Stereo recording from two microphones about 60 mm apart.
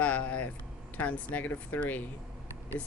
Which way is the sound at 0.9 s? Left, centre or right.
Left.